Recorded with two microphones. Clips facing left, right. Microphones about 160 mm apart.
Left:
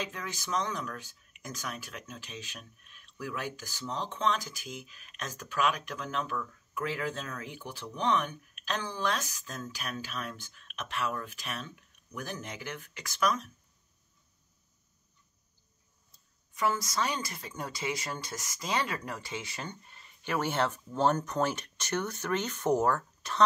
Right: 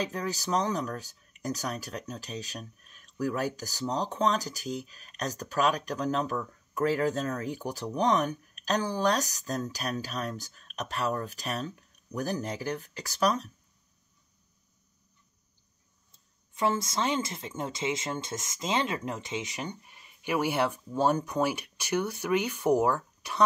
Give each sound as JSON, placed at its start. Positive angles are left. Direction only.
{"t": 0.0, "sound": "speech", "side_deg": -35}
{"t": 16.5, "sound": "speech", "side_deg": -25}